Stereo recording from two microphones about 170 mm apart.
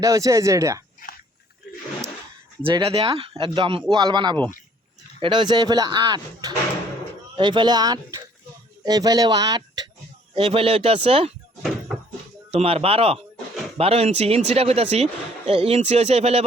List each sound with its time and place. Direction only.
0.0 s speech: 20° right (ahead or behind)
1.0 s a sound: 55° left (ahead or behind)
2.6 s speech: 30° right (ahead or behind)
10.3 s speech: 35° right (ahead or behind)
12.5 s speech: 35° right (ahead or behind)